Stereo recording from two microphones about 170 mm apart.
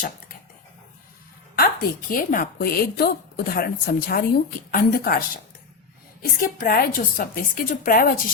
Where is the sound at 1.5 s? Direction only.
60° left (ahead or behind).